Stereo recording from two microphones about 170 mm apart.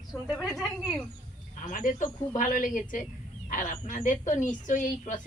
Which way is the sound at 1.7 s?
50° left (ahead or behind).